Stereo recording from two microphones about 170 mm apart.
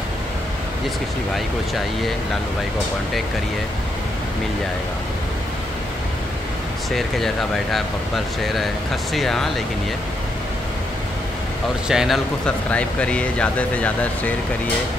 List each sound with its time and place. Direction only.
6.9 s speech: centre (ahead or behind)
9.1 s speech: centre (ahead or behind)
11.9 s speech: centre (ahead or behind)